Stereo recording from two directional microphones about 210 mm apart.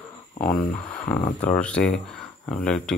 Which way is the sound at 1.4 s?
5° left (ahead or behind).